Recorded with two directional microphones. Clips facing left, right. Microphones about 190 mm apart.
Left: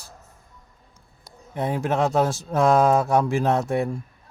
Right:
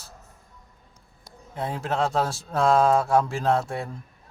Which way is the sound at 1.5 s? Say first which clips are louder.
Left 4 dB; 15° left (ahead or behind).